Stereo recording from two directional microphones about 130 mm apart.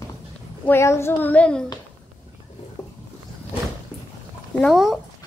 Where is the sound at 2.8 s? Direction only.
25° left (ahead or behind).